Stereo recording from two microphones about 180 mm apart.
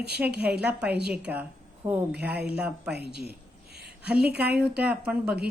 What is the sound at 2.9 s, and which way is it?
Speech, 65° right (ahead or behind).